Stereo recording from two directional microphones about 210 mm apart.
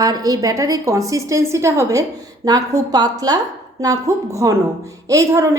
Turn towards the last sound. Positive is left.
turn(degrees=-15)  # may be behind; listen again after turning